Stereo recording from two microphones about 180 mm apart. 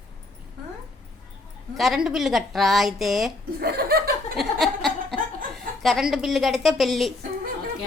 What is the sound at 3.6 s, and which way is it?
Speech, 60° right (ahead or behind).